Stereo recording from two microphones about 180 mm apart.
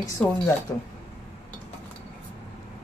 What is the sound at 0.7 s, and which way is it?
Speech, 15° left (ahead or behind).